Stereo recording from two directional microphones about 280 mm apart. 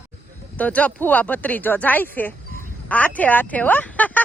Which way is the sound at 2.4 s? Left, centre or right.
Right.